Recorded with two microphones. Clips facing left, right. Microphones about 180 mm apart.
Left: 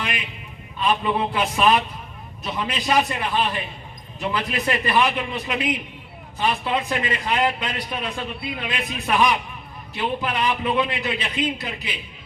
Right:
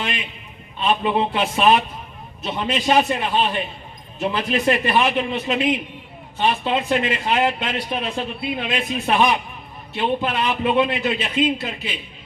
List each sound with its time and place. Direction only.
0.8 s a man's voice: 25° right (ahead or behind)